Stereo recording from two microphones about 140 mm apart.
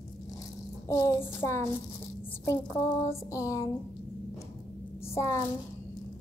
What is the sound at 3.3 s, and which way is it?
Speech, 20° left (ahead or behind).